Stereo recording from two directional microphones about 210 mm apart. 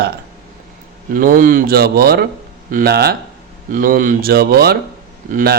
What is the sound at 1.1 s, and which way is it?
Speech, 40° right (ahead or behind).